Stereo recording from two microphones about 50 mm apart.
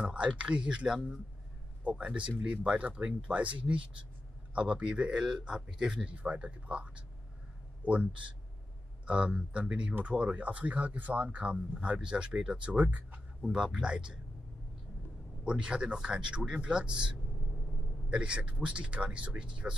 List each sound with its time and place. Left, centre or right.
0.0 s speech: right
1.9 s speech: right
6.0 s speech: right
11.5 s speech: right
13.4 s speech: centre
15.6 s speech: centre
18.1 s speech: right